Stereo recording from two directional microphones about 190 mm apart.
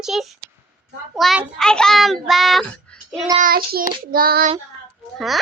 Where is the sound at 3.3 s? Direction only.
50° right (ahead or behind).